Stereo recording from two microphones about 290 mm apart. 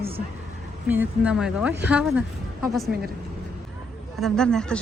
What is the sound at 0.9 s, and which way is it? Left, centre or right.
Speech, centre.